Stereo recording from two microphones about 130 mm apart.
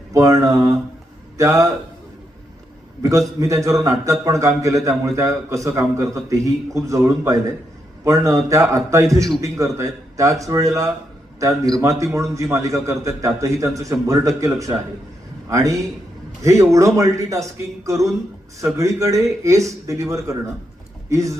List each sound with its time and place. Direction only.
0.1 s a man's voice: 25° right (ahead or behind)
3.0 s a man's voice: 25° right (ahead or behind)